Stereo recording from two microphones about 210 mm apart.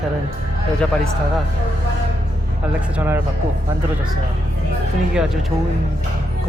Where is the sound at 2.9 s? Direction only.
10° right (ahead or behind).